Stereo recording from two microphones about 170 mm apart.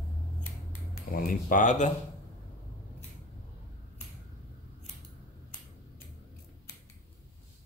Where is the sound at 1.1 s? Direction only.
55° left (ahead or behind).